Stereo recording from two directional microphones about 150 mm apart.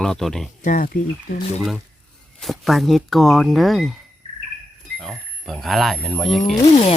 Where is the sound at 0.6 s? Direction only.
60° left (ahead or behind).